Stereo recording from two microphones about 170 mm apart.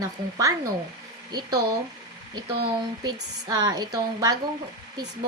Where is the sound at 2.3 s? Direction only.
25° right (ahead or behind).